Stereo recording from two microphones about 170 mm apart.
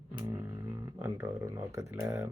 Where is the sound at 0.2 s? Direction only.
20° right (ahead or behind).